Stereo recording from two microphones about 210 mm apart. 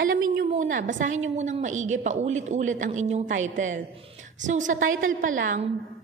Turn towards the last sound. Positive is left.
turn(degrees=-40)  # may be behind; listen again after turning